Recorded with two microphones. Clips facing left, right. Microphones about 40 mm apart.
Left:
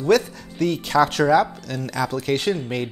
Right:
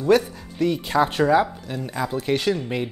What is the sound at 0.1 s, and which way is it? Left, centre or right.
Speech, left.